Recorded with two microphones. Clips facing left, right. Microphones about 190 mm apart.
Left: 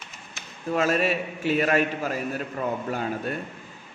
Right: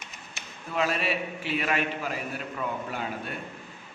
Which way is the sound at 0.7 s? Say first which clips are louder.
Left 4 dB; 45° left (ahead or behind).